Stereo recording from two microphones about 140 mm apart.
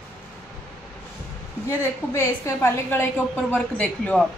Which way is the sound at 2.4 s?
15° left (ahead or behind).